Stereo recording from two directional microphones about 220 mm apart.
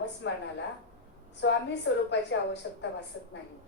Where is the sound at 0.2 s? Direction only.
55° left (ahead or behind).